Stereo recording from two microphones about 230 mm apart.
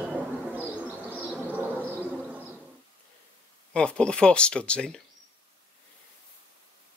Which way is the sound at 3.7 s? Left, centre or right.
Centre.